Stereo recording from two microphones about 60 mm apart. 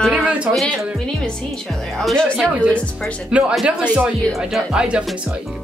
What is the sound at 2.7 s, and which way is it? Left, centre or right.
Speech, left.